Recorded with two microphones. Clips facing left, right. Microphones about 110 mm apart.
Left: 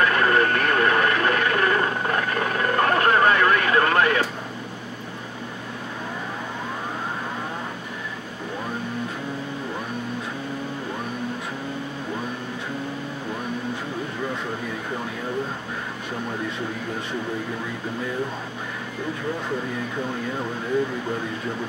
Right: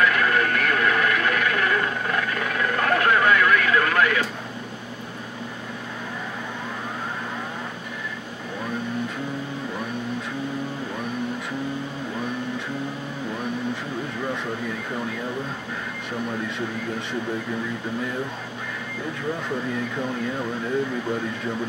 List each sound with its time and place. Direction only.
0.0 s radio: 35° left (ahead or behind)